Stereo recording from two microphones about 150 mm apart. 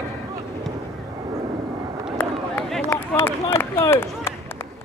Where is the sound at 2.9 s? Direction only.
15° left (ahead or behind).